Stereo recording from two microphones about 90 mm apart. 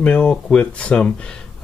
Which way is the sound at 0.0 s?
10° left (ahead or behind).